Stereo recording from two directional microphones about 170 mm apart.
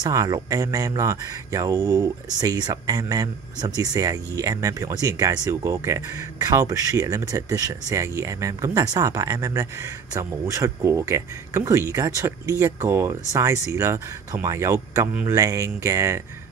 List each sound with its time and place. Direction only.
0.0 s speech: 20° right (ahead or behind)